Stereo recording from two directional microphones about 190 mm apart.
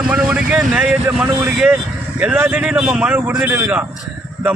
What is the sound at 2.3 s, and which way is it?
Speech, 10° right (ahead or behind).